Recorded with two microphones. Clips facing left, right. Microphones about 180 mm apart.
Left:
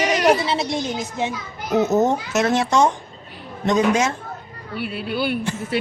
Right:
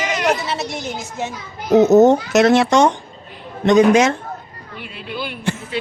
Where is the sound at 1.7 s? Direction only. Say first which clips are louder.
Right 8 dB; 75° right (ahead or behind).